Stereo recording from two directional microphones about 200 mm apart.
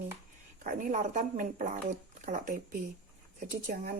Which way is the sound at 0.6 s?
40° right (ahead or behind).